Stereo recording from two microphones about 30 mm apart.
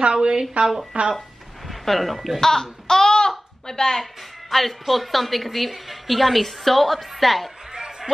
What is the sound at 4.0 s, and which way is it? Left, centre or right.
A woman's voice, centre.